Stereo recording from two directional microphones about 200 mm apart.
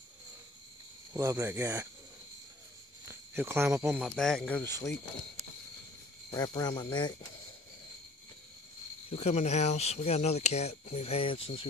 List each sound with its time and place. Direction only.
1.1 s speech: 15° right (ahead or behind)
3.1 s speech: 10° right (ahead or behind); by 4.9 s 10° left (ahead or behind)
6.3 s speech: 20° left (ahead or behind)
9.1 s speech: 35° left (ahead or behind)